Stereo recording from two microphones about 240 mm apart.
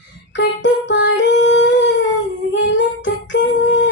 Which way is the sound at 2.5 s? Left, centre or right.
Left.